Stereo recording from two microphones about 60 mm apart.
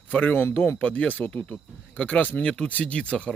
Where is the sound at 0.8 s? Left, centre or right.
Left.